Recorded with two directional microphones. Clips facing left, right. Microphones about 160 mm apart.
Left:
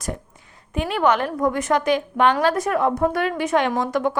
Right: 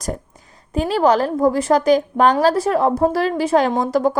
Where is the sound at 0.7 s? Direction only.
35° right (ahead or behind).